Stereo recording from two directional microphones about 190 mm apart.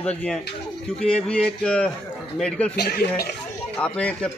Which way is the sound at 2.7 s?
55° left (ahead or behind).